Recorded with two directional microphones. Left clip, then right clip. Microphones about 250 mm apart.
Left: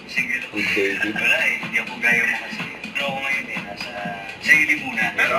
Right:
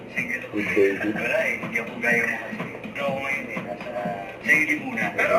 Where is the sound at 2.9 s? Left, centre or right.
Centre.